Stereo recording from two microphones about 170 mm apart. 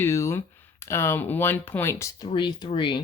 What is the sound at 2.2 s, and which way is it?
Speech, 25° left (ahead or behind).